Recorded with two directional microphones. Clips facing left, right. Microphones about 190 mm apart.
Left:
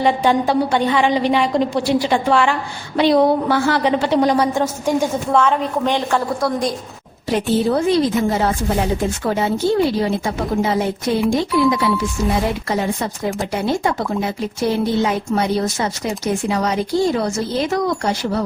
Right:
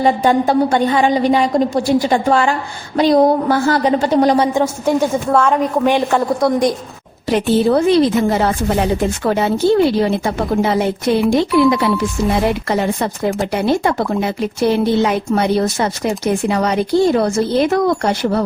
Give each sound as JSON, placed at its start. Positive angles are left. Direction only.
{"t": 0.0, "sound": "a woman's voice", "side_deg": -45}
{"t": 5.3, "sound": "a woman's voice", "side_deg": -10}
{"t": 6.1, "sound": "a woman's voice", "side_deg": -20}
{"t": 7.3, "sound": "a woman's voice", "side_deg": -70}